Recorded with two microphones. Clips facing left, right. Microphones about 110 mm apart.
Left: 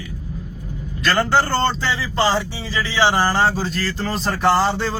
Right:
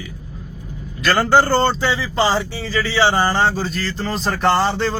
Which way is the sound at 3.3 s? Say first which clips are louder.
Even; 5° left (ahead or behind).